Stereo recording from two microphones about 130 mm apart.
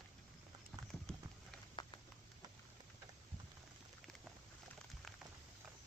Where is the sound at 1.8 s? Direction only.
35° left (ahead or behind).